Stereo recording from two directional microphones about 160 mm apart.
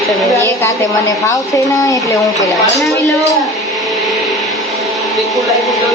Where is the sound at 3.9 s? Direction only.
Centre (ahead or behind).